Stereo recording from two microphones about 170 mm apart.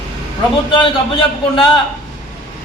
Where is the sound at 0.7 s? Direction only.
30° left (ahead or behind).